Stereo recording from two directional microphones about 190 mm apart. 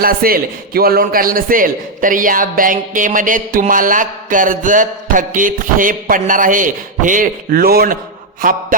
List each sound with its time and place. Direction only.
0.0 s a man's voice: 50° right (ahead or behind)